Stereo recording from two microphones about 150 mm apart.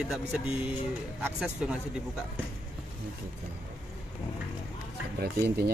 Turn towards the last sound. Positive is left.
turn(degrees=-90)